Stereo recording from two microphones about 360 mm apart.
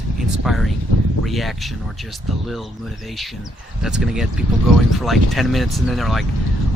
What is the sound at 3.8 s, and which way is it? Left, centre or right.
Speech, centre.